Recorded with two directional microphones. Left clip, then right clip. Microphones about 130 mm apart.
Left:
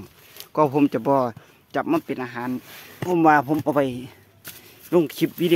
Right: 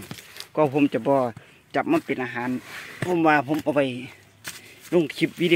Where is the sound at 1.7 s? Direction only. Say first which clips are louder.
Even; 10° left (ahead or behind).